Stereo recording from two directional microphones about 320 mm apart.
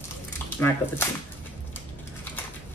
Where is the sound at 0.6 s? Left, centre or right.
Centre.